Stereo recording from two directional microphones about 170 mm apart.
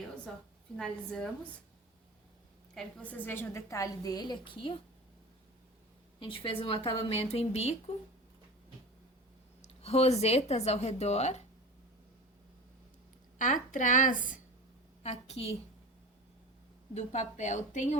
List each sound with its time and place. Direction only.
0.8 s a woman's voice: 5° left (ahead or behind)
2.7 s a woman's voice: 10° left (ahead or behind); by 4.8 s 30° left (ahead or behind)
6.1 s a woman's voice: 30° left (ahead or behind)
9.6 s a woman's voice: 35° left (ahead or behind)
13.4 s a woman's voice: 50° left (ahead or behind)
15.0 s a woman's voice: 40° left (ahead or behind)
16.9 s a woman's voice: 40° left (ahead or behind)